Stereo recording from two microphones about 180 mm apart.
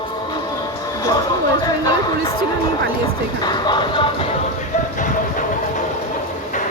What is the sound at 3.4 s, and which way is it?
Speech, 25° left (ahead or behind).